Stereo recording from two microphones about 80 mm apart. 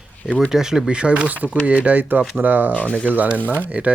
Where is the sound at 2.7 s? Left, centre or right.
Centre.